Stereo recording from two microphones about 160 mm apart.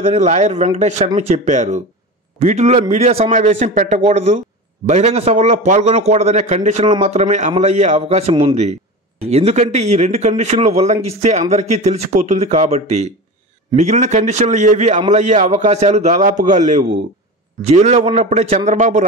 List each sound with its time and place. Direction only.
0.0 s a man's voice: 45° right (ahead or behind)